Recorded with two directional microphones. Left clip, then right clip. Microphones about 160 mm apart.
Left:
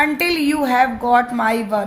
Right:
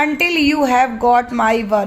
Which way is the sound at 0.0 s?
40° right (ahead or behind).